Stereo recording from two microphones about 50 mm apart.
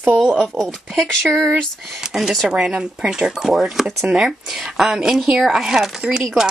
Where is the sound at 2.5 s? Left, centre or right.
Centre.